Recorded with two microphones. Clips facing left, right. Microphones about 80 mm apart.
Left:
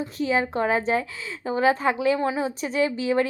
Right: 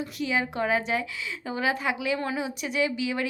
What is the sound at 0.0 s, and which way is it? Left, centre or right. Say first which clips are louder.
A woman's voice: left 4 dB; left.